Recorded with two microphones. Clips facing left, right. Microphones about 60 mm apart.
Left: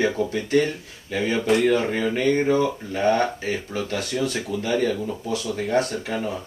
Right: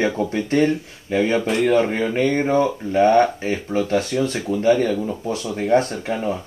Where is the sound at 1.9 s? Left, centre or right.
Right.